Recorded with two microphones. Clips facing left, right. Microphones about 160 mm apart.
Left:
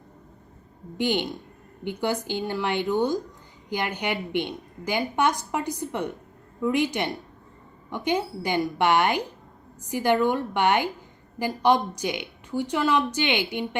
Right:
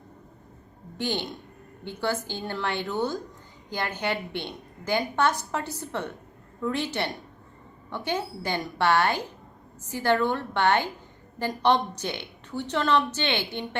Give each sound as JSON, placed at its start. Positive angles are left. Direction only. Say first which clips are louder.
{"t": 0.9, "sound": "a woman's voice", "louder": "left 5 dB", "side_deg": 15}